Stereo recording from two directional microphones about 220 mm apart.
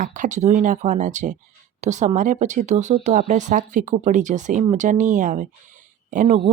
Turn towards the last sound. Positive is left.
turn(degrees=-30)  # may be behind; listen again after turning